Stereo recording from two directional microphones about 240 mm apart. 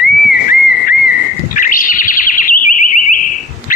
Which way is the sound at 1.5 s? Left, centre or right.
Left.